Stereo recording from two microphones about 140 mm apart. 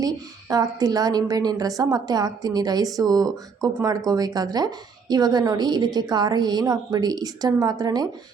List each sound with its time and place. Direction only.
0.0 s a woman's voice: 25° right (ahead or behind)